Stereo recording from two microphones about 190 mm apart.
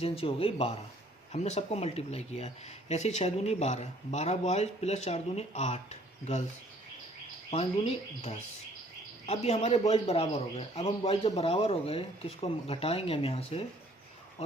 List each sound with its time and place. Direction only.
0.0 s a man's voice: 30° left (ahead or behind)
7.5 s a man's voice: 30° left (ahead or behind)